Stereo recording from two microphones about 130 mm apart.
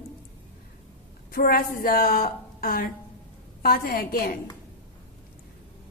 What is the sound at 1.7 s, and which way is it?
A woman's voice, 90° left.